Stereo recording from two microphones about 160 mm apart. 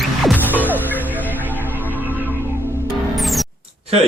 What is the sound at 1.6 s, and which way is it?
Music, 10° right (ahead or behind).